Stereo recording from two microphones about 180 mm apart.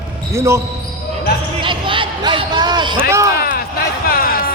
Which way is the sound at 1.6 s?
30° right (ahead or behind).